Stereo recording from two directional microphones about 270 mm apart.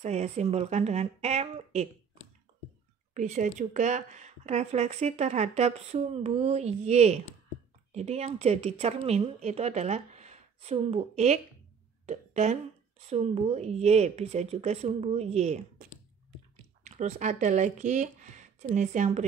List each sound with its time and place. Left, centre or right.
0.0 s speech: right
3.2 s speech: right